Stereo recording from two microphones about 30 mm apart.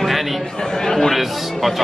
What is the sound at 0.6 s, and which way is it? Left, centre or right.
Speech, centre.